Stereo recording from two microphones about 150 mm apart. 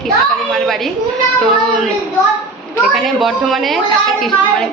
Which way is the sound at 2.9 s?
Centre (ahead or behind).